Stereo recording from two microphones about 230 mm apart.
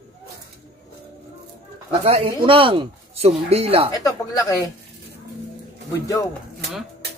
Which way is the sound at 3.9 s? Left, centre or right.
Centre.